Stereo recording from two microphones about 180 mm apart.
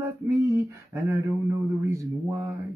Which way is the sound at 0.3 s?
15° right (ahead or behind).